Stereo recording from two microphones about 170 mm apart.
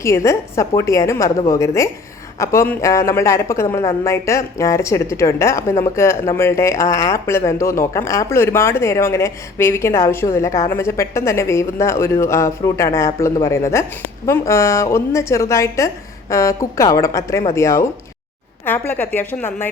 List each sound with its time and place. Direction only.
0.0 s a woman's voice: 15° left (ahead or behind)